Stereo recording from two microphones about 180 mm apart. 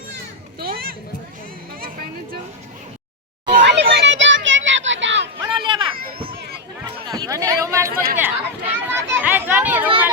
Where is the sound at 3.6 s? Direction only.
75° right (ahead or behind).